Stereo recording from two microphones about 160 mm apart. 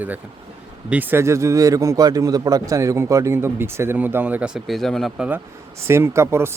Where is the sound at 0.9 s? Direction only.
10° right (ahead or behind).